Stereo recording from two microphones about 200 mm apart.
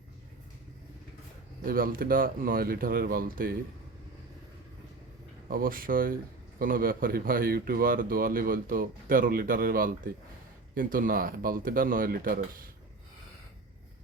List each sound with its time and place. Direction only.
1.6 s speech: 45° right (ahead or behind)
5.5 s speech: 45° right (ahead or behind)